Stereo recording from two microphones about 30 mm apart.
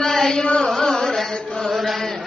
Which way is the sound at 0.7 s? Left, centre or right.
Centre.